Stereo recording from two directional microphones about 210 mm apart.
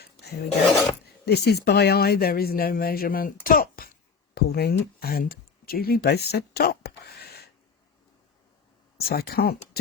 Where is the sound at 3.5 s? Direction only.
45° left (ahead or behind).